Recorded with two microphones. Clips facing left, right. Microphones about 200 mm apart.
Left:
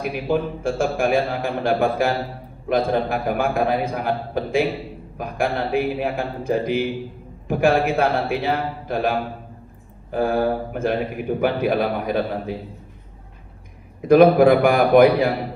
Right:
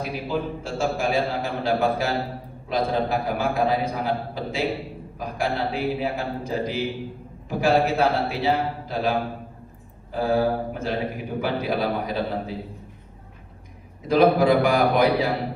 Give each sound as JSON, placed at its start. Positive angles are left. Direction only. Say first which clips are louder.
{"t": 0.0, "sound": "a man's voice", "louder": "left 5 dB", "side_deg": 55}
{"t": 14.1, "sound": "a man's voice", "louder": "left 5 dB", "side_deg": 55}